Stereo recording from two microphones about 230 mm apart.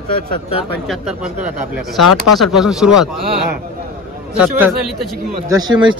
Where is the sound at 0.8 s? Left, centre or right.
Centre.